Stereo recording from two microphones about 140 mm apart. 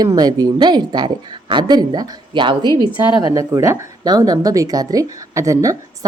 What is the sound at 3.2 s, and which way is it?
A woman's voice, 25° right (ahead or behind).